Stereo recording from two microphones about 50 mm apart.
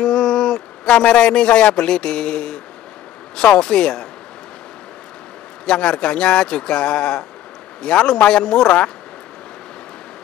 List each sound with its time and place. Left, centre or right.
0.0 s speech: centre
5.7 s speech: centre